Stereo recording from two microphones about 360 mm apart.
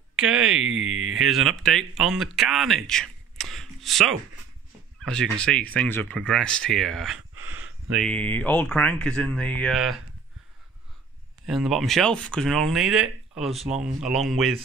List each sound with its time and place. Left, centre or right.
0.1 s speech: centre
0.7 s speech: right
1.1 s speech: centre
7.2 s a sound: right
7.9 s speech: centre
11.4 s speech: centre